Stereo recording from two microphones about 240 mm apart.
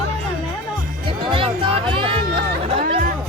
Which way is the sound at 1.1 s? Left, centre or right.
Right.